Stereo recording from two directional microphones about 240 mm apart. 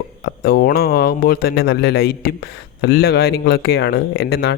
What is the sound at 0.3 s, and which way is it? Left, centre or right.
Speech, left.